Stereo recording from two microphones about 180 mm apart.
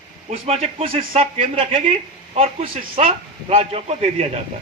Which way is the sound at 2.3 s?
35° right (ahead or behind).